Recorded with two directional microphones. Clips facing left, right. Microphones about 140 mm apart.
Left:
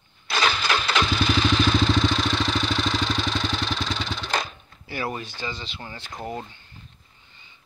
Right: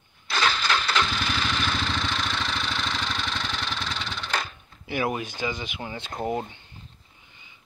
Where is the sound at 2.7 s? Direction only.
35° left (ahead or behind).